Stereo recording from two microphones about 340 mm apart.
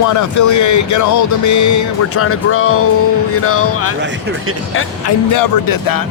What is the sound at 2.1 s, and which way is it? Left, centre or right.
Speech, left.